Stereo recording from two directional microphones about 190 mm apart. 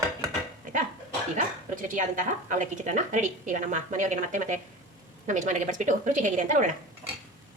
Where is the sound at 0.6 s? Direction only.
45° right (ahead or behind).